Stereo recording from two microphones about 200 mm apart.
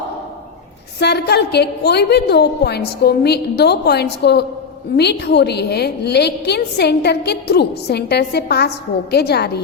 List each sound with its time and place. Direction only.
0.9 s a woman's voice: 55° left (ahead or behind)